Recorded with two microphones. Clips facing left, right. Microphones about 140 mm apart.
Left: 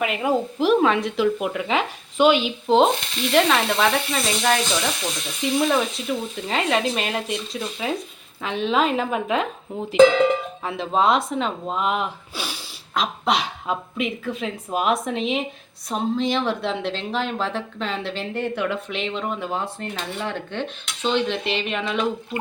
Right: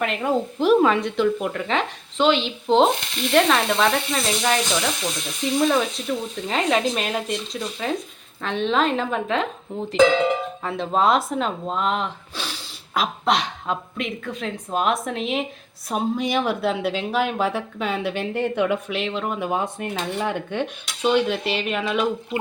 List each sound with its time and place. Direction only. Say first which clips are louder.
0.0 s speech: left 1 dB; 5° left (ahead or behind)
12.9 s speech: right 1 dB; centre (ahead or behind)
15.9 s speech: even; 10° right (ahead or behind)
18.9 s speech: right 1 dB; 5° right (ahead or behind)
19.4 s speech: right 3 dB; 15° right (ahead or behind)